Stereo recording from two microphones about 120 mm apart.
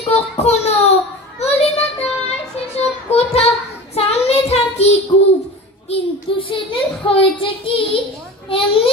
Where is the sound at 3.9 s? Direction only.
60° left (ahead or behind).